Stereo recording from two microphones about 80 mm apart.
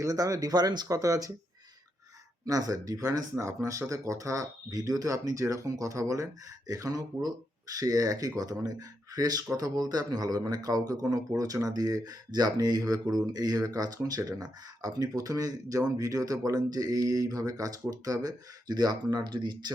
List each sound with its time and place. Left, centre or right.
0.0 s speech: right
2.5 s speech: right